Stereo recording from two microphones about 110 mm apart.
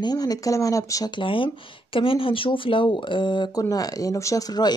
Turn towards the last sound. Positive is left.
turn(degrees=40)  # may be behind; listen again after turning